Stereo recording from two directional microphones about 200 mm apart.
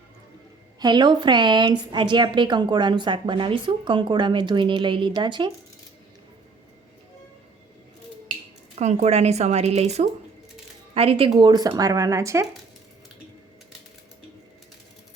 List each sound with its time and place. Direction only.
0.8 s a woman's voice: 20° right (ahead or behind)
8.8 s a woman's voice: 35° right (ahead or behind); by 12.5 s 15° right (ahead or behind)